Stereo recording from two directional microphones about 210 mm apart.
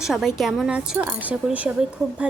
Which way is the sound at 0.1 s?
Centre (ahead or behind).